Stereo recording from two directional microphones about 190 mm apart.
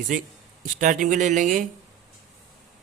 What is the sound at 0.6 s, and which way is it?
Speech, 45° right (ahead or behind).